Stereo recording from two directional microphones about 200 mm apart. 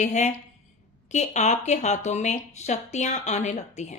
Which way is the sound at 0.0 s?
35° left (ahead or behind).